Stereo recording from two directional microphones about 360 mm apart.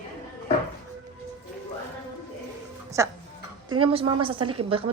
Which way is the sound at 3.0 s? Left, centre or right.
Centre.